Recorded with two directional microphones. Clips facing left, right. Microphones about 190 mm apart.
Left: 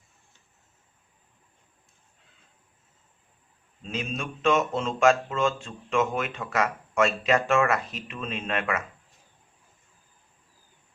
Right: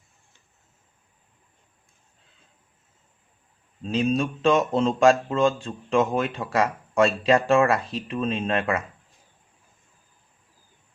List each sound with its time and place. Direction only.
3.8 s speech: 35° right (ahead or behind)